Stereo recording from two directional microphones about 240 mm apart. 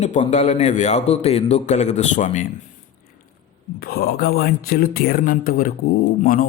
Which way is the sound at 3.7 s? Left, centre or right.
Left.